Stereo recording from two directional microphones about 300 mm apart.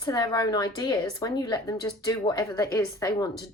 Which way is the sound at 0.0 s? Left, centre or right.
Centre.